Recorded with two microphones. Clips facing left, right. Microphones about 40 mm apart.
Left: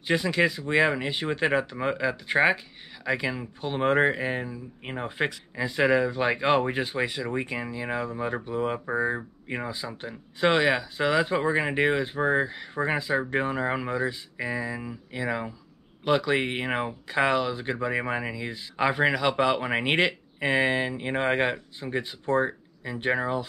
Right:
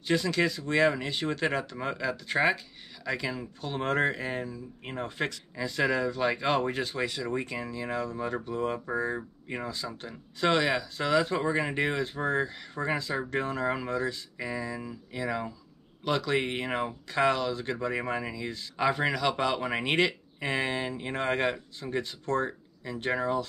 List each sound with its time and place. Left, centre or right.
0.0 s speech: left